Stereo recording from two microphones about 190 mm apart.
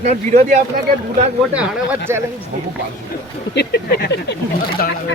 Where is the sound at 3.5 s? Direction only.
60° left (ahead or behind).